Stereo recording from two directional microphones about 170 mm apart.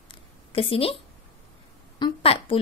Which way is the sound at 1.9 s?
30° left (ahead or behind).